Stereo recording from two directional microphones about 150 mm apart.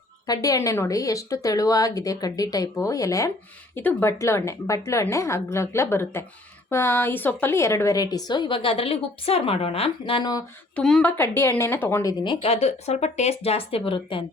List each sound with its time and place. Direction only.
0.3 s a woman's voice: 20° left (ahead or behind)
10.8 s a woman's voice: 5° left (ahead or behind)
11.2 s a woman's voice: 15° left (ahead or behind)
12.1 s speech: 30° left (ahead or behind)